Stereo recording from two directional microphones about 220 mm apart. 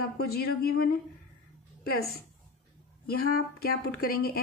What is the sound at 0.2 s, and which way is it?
Speech, 45° left (ahead or behind).